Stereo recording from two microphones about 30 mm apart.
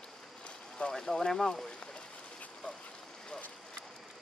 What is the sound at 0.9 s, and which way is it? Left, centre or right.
Speech, centre.